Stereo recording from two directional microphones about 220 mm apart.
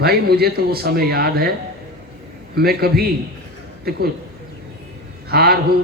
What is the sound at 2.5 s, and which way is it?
Speech, 45° right (ahead or behind).